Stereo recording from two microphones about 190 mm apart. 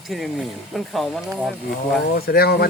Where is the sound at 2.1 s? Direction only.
55° left (ahead or behind).